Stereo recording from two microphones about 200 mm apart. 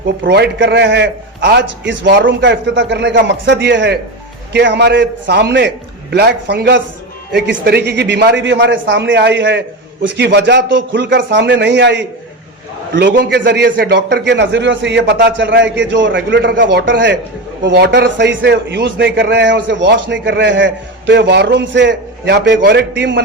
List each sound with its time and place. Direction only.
0.3 s a man's voice: 60° right (ahead or behind)